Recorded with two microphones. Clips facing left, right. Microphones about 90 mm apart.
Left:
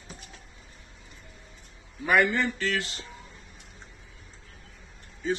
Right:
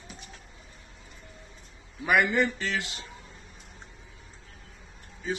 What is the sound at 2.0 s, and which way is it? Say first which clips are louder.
Speech: even; 15° right (ahead or behind).